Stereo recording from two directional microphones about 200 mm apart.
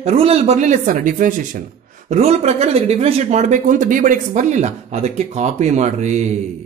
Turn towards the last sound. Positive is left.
turn(degrees=-35)  # may be behind; listen again after turning